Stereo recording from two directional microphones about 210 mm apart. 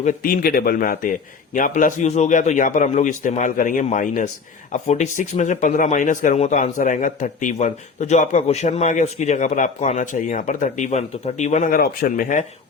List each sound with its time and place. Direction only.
0.0 s a man's voice: 40° left (ahead or behind)